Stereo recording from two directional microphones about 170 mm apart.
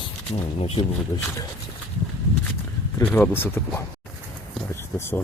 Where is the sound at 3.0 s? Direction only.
10° left (ahead or behind).